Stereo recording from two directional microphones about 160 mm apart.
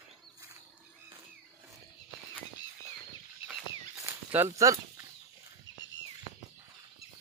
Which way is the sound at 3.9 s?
20° right (ahead or behind).